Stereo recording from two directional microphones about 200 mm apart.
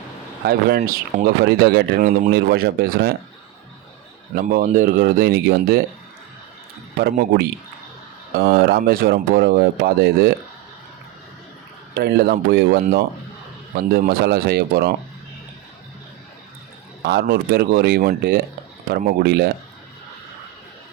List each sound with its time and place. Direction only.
0.8 s speech: 40° right (ahead or behind)
1.5 s speech: 55° right (ahead or behind)
4.4 s speech: 45° right (ahead or behind)
7.0 s speech: 50° right (ahead or behind)
11.9 s speech: 50° right (ahead or behind)
17.0 s speech: 55° right (ahead or behind)